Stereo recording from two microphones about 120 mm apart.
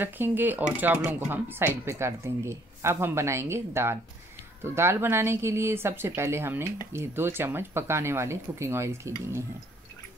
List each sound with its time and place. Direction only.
0.0 s speech: 15° right (ahead or behind)